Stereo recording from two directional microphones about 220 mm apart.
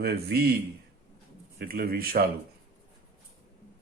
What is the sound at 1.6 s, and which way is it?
Speech, 45° right (ahead or behind).